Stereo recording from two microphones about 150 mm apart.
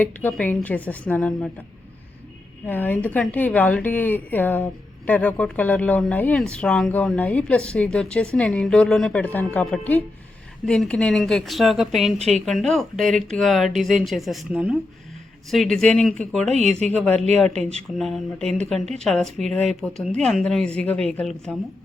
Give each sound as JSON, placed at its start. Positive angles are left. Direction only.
{"t": 0.0, "sound": "a woman's voice", "side_deg": 10}
{"t": 2.6, "sound": "a woman's voice", "side_deg": 10}
{"t": 17.5, "sound": "speech", "side_deg": -45}
{"t": 17.9, "sound": "speech", "side_deg": 0}